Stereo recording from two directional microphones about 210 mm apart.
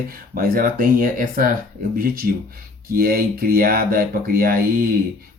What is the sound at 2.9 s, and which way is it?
Speech, 45° right (ahead or behind).